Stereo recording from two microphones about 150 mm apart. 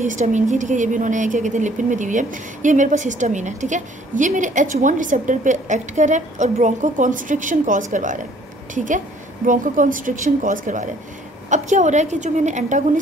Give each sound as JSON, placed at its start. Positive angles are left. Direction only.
{"t": 0.0, "sound": "a woman's voice", "side_deg": -55}